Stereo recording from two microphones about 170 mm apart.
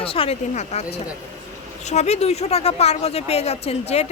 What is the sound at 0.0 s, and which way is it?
Speech, 35° left (ahead or behind).